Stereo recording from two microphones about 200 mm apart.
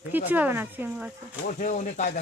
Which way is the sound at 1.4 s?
40° left (ahead or behind).